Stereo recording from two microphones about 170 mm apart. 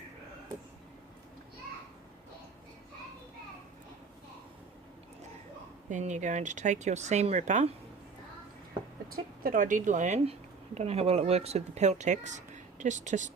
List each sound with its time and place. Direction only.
5.9 s speech: 45° right (ahead or behind)
9.0 s speech: 55° right (ahead or behind)